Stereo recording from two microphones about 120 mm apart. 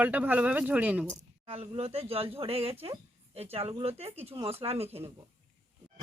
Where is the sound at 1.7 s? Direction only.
55° right (ahead or behind).